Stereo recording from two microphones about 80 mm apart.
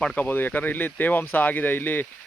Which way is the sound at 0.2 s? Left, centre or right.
Left.